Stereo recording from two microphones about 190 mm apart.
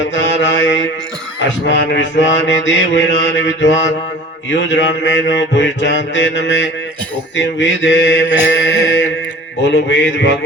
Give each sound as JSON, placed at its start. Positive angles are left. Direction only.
{"t": 0.0, "sound": "mantra", "side_deg": 75}